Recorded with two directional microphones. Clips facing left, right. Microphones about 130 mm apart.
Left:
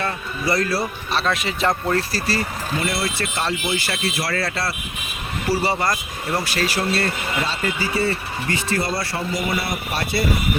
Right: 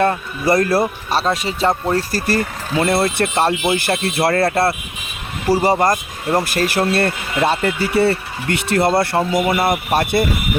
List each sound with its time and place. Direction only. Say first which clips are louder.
0.0 s speech: right 8 dB; 45° right (ahead or behind)
1.2 s speech: right 3 dB; 35° right (ahead or behind)
2.1 s speech: right 5 dB; 50° right (ahead or behind)